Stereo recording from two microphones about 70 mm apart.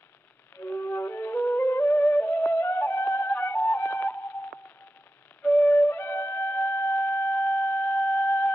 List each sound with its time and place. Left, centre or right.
0.6 s music: left
1.6 s music: left
5.5 s flute: left